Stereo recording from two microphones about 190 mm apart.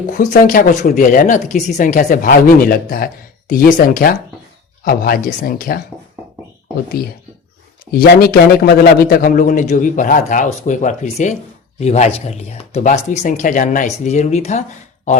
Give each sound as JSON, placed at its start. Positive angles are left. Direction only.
{"t": 0.1, "sound": "speech", "side_deg": 45}
{"t": 7.9, "sound": "speech", "side_deg": 50}